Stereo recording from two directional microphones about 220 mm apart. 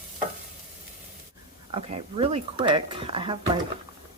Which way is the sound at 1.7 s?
25° right (ahead or behind).